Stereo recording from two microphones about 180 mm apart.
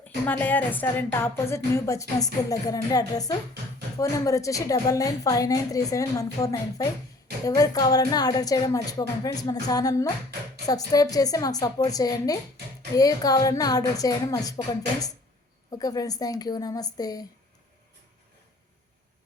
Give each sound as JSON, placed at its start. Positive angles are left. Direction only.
{"t": 0.3, "sound": "a woman's voice", "side_deg": 10}